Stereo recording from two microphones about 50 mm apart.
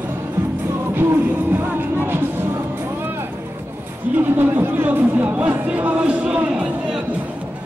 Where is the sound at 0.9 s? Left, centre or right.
Right.